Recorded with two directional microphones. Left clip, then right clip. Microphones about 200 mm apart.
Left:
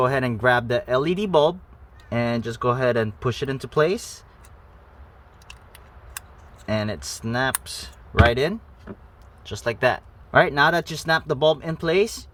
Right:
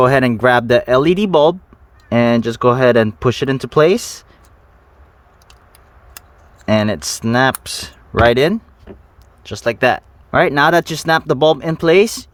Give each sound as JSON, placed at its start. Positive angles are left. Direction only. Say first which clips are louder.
{"t": 0.0, "sound": "speech", "louder": "right 9 dB", "side_deg": -45}
{"t": 6.7, "sound": "speech", "louder": "right 11 dB", "side_deg": -55}
{"t": 9.4, "sound": "speech", "louder": "right 7 dB", "side_deg": -40}